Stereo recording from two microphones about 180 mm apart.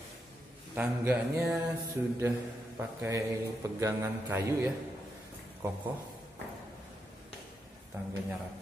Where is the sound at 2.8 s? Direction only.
15° right (ahead or behind).